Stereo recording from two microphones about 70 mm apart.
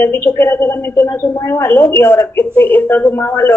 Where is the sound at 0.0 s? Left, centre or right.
Left.